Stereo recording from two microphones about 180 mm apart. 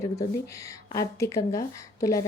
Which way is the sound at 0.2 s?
20° left (ahead or behind).